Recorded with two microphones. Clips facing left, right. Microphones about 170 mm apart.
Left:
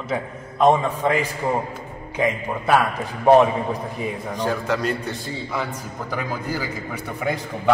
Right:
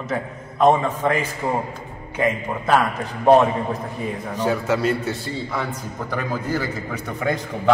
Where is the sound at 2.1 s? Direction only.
15° left (ahead or behind).